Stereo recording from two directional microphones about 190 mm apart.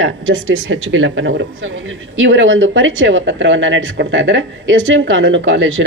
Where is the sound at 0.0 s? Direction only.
90° right.